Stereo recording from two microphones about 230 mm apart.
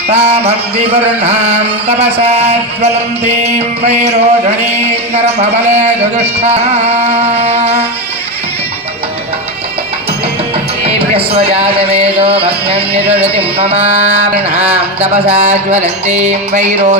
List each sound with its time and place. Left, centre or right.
0.1 s music: right
10.8 s music: right